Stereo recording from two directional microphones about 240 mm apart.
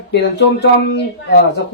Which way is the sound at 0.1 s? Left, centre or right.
Left.